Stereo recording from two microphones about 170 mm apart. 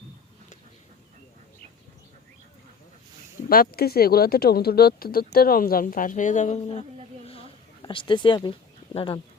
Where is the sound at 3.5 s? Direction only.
60° left (ahead or behind); by 6.8 s 40° left (ahead or behind).